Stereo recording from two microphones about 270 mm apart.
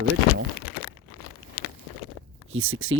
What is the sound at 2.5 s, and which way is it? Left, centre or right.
Speech, right.